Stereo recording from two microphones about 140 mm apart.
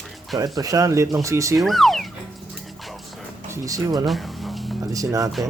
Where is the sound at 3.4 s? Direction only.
20° right (ahead or behind).